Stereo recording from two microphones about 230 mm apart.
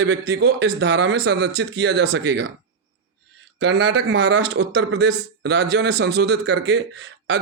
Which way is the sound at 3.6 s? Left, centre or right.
Right.